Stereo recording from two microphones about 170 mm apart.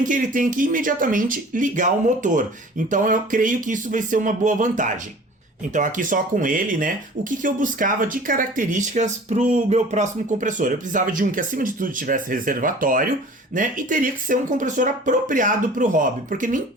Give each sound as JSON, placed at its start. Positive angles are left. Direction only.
{"t": 0.0, "sound": "speech", "side_deg": -50}